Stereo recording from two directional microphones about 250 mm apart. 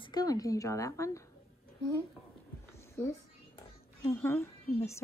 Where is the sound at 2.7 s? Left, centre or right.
Centre.